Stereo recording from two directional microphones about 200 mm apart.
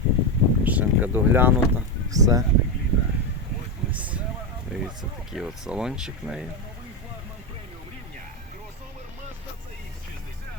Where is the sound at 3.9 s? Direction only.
5° right (ahead or behind).